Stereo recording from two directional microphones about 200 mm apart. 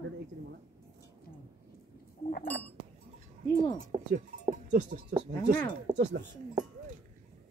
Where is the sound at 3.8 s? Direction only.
45° right (ahead or behind).